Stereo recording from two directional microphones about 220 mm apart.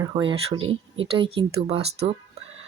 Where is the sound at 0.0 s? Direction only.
20° right (ahead or behind).